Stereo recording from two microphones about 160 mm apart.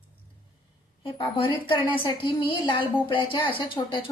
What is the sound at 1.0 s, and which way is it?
A woman's voice, 30° left (ahead or behind).